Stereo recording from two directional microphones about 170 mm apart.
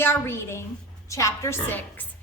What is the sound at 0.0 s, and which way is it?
A woman's voice, 15° left (ahead or behind).